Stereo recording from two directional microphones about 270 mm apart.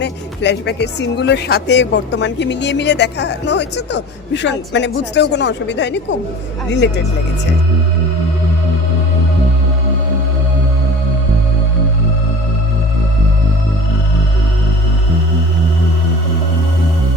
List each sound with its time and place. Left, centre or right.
0.0 s speech: left